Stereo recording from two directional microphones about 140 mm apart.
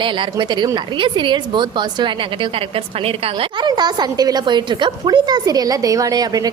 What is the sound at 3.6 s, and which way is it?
A woman's voice, 30° right (ahead or behind).